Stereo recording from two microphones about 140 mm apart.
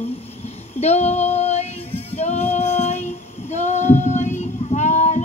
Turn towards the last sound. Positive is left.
turn(degrees=55)  # may be behind; listen again after turning